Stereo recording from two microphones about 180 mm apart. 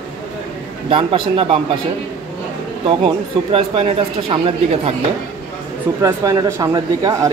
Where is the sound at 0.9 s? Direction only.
30° right (ahead or behind).